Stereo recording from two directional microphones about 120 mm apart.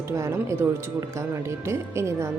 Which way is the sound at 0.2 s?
25° right (ahead or behind).